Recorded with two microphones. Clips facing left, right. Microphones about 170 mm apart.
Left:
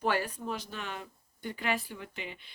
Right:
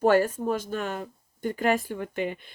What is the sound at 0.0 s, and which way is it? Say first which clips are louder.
Speech: right 10 dB; 45° right (ahead or behind).